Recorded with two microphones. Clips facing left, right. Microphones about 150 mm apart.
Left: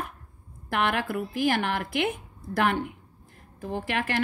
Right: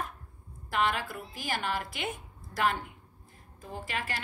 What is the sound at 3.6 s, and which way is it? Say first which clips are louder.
Speech: left 8 dB; 65° left (ahead or behind).